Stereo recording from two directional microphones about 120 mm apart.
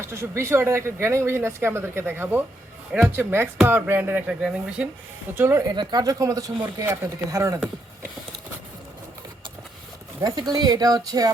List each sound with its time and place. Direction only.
0.0 s speech: 20° right (ahead or behind)
5.4 s speech: 25° right (ahead or behind)
5.7 s speech: 35° right (ahead or behind)
10.2 s speech: 30° right (ahead or behind)